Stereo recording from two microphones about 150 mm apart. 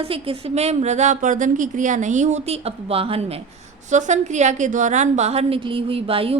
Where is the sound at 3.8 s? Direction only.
55° right (ahead or behind).